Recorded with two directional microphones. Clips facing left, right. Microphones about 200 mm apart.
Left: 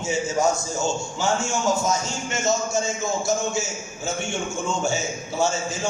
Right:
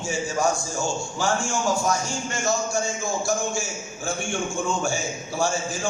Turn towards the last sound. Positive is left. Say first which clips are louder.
# left 1 dB
turn(degrees=20)  # may be behind; listen again after turning